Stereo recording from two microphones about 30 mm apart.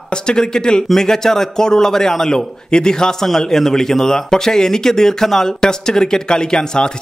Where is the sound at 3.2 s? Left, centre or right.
Centre.